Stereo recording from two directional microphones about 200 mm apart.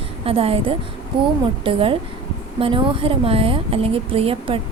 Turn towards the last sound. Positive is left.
turn(degrees=-30)  # may be behind; listen again after turning